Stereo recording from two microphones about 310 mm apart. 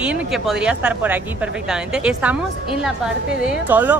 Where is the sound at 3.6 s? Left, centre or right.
Centre.